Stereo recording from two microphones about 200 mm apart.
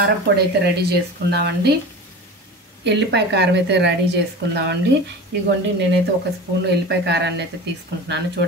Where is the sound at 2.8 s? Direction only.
60° right (ahead or behind).